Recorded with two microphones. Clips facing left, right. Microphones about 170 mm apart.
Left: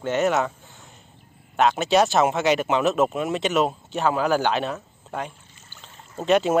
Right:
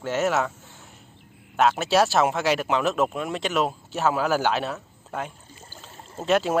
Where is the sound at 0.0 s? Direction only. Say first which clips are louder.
Left 2 dB; centre (ahead or behind).